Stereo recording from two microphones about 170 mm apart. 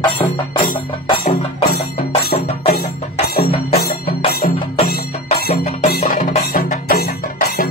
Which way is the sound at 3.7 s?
65° left (ahead or behind).